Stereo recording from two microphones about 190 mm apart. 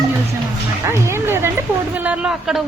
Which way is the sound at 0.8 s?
15° right (ahead or behind).